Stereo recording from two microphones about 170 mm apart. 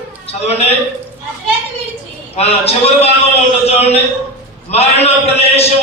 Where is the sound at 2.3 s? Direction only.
40° left (ahead or behind).